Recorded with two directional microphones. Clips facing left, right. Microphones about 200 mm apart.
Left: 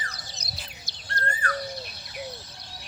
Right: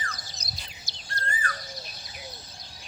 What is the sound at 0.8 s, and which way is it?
Bird, 60° left (ahead or behind).